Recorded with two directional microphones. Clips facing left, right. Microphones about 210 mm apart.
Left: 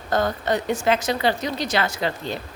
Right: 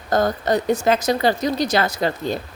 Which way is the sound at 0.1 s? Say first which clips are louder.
Right 3 dB; 40° right (ahead or behind).